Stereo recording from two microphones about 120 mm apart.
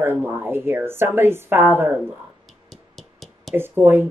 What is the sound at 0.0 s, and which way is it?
A woman's voice, 20° right (ahead or behind).